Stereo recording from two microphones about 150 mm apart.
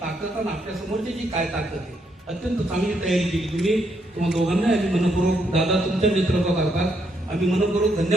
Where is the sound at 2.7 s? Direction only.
Centre (ahead or behind).